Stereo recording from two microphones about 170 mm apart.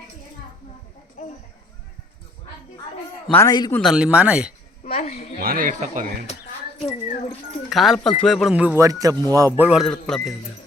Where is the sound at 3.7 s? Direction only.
Centre (ahead or behind).